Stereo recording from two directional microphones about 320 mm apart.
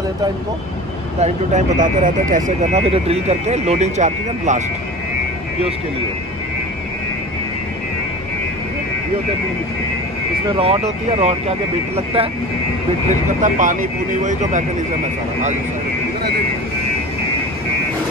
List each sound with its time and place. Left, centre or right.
1.2 s speech: right
10.6 s speech: centre
13.4 s speech: right